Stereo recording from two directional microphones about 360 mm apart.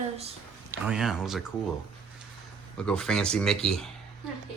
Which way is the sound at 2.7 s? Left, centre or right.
Centre.